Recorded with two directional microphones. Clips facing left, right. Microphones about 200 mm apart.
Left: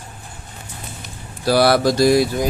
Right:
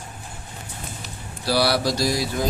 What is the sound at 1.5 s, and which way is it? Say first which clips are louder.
Speech: left 6 dB; 50° left (ahead or behind).